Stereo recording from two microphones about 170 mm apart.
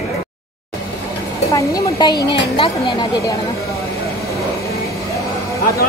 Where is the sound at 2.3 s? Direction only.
35° left (ahead or behind).